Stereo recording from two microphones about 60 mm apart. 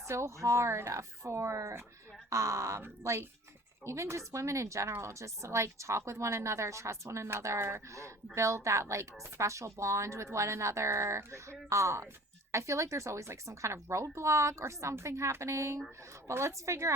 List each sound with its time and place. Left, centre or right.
0.1 s a woman's voice: right